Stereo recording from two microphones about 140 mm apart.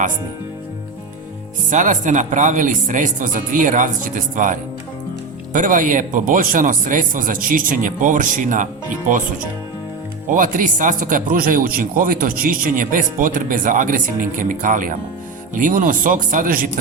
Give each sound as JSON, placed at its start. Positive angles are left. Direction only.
{"t": 1.7, "sound": "a man's voice", "side_deg": -60}
{"t": 5.5, "sound": "a man's voice", "side_deg": -70}
{"t": 10.2, "sound": "a man's voice", "side_deg": -70}